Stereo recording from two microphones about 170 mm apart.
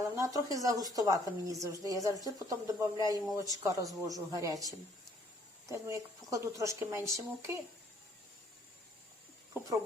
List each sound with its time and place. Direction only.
0.0 s speech: 20° right (ahead or behind)